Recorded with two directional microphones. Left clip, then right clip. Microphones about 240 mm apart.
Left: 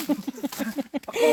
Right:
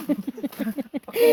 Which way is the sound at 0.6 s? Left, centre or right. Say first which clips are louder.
Left 1 dB; centre.